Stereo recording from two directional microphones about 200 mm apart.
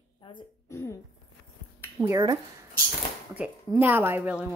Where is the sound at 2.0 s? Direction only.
15° right (ahead or behind).